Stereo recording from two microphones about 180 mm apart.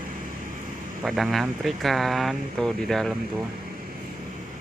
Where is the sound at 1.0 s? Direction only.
Centre (ahead or behind).